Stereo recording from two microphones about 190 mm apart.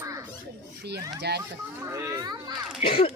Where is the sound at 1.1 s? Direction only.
60° right (ahead or behind).